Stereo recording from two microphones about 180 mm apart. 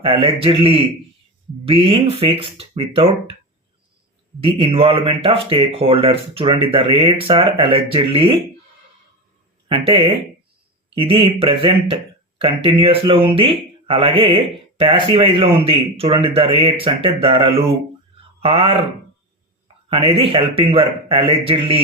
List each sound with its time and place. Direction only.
0.0 s speech: 30° right (ahead or behind)
4.4 s speech: 30° right (ahead or behind)
9.6 s speech: 25° right (ahead or behind)
20.0 s a man's voice: 30° right (ahead or behind)